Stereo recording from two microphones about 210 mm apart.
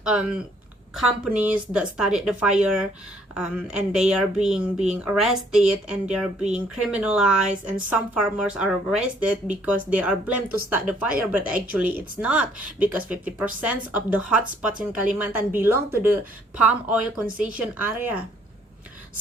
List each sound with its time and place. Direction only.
0.0 s a woman's voice: 5° right (ahead or behind)